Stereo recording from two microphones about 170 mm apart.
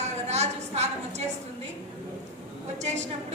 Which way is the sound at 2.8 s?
40° right (ahead or behind).